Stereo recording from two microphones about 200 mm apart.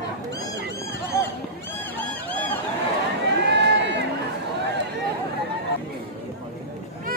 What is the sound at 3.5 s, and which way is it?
Run, 60° right (ahead or behind).